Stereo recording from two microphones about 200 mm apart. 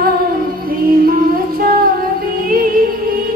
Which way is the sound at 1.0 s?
45° right (ahead or behind).